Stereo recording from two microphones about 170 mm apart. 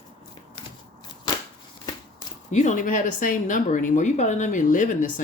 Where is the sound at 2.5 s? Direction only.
45° left (ahead or behind).